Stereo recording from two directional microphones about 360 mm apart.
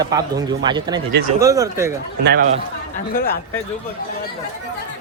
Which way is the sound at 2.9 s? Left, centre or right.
Left.